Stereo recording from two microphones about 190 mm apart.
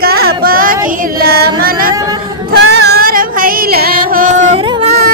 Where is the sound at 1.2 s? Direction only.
55° right (ahead or behind).